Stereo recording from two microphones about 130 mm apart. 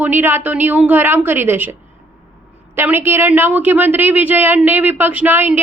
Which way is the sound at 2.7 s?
15° right (ahead or behind).